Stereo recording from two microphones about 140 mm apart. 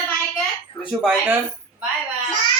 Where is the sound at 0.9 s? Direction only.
5° right (ahead or behind).